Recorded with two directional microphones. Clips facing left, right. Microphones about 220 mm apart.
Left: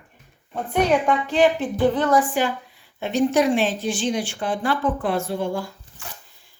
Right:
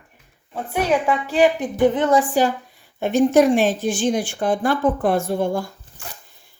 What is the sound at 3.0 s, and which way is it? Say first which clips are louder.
A woman's voice: right 4 dB; 50° right (ahead or behind).